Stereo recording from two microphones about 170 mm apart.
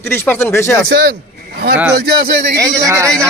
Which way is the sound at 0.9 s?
75° right (ahead or behind).